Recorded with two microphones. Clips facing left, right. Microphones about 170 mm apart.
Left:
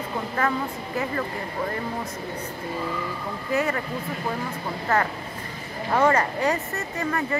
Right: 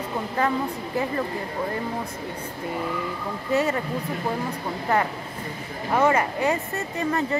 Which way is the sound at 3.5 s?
25° right (ahead or behind).